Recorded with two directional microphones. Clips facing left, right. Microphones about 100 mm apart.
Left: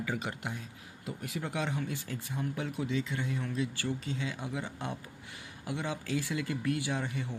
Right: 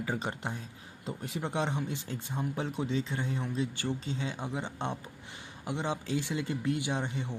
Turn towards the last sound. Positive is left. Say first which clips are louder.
# right 1 dB
turn(degrees=-25)  # may be behind; listen again after turning